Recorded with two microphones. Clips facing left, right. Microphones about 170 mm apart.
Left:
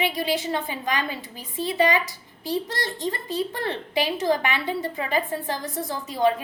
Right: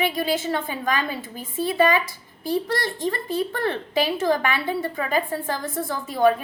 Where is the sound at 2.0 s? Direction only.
50° right (ahead or behind).